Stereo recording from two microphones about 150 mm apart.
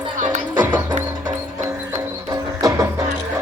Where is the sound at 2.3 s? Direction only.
25° right (ahead or behind).